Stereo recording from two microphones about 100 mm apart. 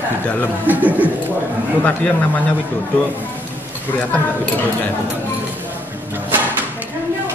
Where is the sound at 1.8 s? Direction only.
15° left (ahead or behind).